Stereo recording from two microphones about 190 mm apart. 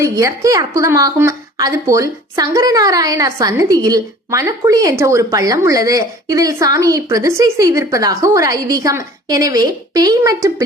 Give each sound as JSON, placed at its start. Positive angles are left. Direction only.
{"t": 0.0, "sound": "a woman's voice", "side_deg": -15}